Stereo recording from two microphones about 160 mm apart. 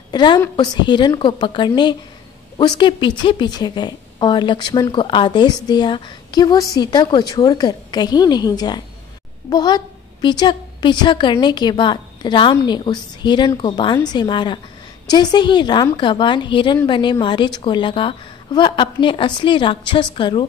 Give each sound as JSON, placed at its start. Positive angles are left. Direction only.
{"t": 0.1, "sound": "a woman's voice", "side_deg": 25}